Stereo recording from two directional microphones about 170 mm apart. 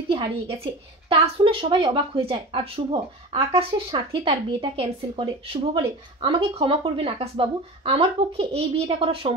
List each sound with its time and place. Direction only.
0.1 s a woman's voice: 35° right (ahead or behind)